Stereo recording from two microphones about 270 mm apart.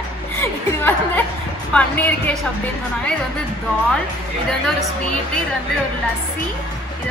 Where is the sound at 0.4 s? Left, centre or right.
Centre.